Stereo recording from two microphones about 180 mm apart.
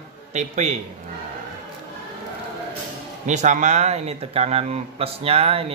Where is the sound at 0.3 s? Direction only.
40° right (ahead or behind).